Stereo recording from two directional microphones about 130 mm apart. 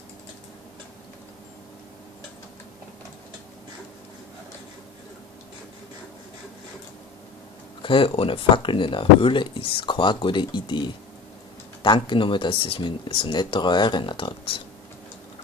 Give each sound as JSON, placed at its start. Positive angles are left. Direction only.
{"t": 7.8, "sound": "speech", "side_deg": 40}